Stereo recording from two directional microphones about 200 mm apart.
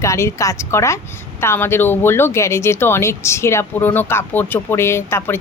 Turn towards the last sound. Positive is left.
turn(degrees=10)  # may be behind; listen again after turning